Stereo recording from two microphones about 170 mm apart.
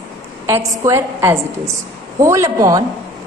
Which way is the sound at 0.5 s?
20° right (ahead or behind).